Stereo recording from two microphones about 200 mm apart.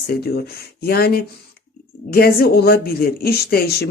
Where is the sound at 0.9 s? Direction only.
50° left (ahead or behind).